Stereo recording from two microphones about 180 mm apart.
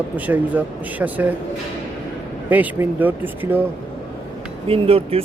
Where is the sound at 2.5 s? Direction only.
10° right (ahead or behind).